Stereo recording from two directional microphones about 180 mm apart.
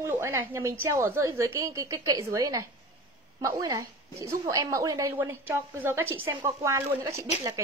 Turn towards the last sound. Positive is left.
turn(degrees=-15)  # may be behind; listen again after turning